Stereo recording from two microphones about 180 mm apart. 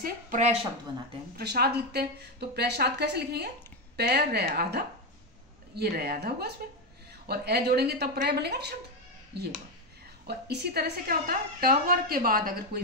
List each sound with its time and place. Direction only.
0.0 s speech: 45° right (ahead or behind)
1.3 s a woman's voice: 60° right (ahead or behind)